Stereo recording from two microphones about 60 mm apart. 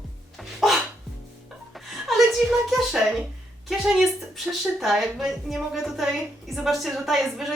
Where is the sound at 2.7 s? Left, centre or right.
Centre.